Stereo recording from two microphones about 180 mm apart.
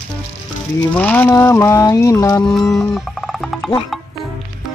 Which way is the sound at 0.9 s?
10° left (ahead or behind).